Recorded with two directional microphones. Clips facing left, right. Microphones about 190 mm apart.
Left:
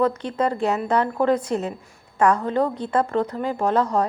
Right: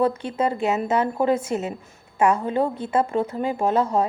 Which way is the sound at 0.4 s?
20° right (ahead or behind).